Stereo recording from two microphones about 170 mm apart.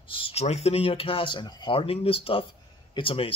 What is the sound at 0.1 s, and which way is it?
Speech, 35° left (ahead or behind).